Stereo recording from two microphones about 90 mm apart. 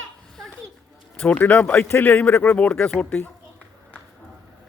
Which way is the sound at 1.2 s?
15° left (ahead or behind).